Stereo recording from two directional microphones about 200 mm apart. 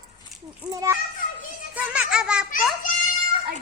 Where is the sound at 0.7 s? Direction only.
15° right (ahead or behind).